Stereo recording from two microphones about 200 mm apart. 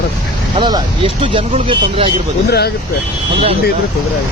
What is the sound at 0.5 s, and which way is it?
Speech, 25° right (ahead or behind).